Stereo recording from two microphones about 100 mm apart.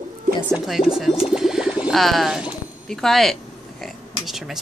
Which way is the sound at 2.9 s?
5° left (ahead or behind).